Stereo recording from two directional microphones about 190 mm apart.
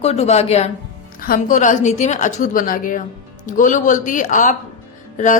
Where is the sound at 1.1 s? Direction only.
45° left (ahead or behind).